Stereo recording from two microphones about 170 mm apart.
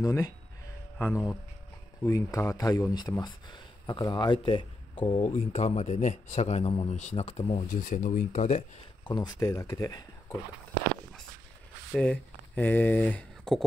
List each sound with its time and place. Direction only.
0.0 s speech: 15° left (ahead or behind)
5.2 s a man's voice: 40° left (ahead or behind)
7.7 s speech: 50° left (ahead or behind)
9.0 s speech: 25° left (ahead or behind)
11.9 s speech: 5° left (ahead or behind)